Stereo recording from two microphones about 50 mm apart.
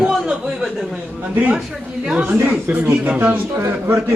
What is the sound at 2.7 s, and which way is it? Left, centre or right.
Speech, right.